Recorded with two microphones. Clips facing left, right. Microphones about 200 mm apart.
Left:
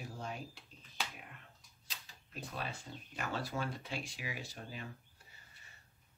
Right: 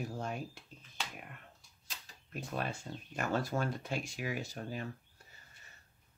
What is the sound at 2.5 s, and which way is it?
Speech, 50° right (ahead or behind).